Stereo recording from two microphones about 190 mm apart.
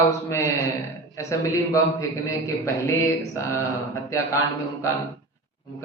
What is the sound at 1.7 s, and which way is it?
Speech, 15° left (ahead or behind).